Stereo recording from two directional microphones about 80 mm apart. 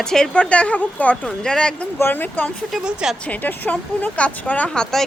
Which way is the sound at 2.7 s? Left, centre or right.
Centre.